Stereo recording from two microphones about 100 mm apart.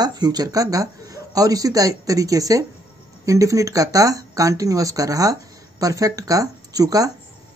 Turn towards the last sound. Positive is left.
turn(degrees=-35)  # may be behind; listen again after turning